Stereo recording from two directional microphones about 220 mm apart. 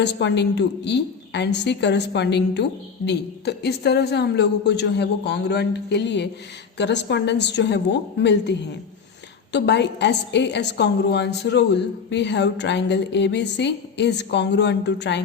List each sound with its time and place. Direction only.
0.0 s a woman's voice: 55° left (ahead or behind)